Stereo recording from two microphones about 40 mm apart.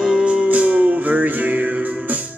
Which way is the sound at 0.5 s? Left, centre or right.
Right.